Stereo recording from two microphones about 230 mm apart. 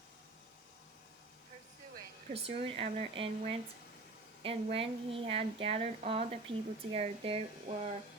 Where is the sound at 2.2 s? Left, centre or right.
Right.